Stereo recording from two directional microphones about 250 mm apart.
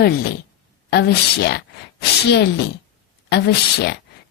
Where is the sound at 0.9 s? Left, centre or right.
Left.